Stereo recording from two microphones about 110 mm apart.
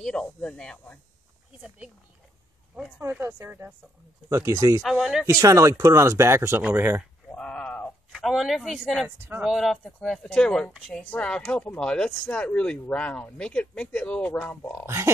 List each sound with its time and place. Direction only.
0.0 s speech: 5° left (ahead or behind)
3.0 s speech: 25° right (ahead or behind)
4.8 s speech: 5° right (ahead or behind)
5.2 s speech: 30° right (ahead or behind)
7.3 s speech: 10° left (ahead or behind)
8.1 s speech: centre (ahead or behind)
10.7 s speech: 5° right (ahead or behind)
11.1 s speech: 10° left (ahead or behind)
14.9 s speech: 25° right (ahead or behind)